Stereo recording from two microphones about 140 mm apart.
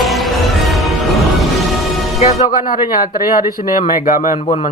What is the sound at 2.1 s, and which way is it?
Music, 50° left (ahead or behind).